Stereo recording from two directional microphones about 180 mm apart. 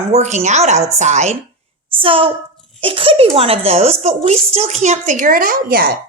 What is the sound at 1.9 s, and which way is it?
A woman's voice, 30° right (ahead or behind).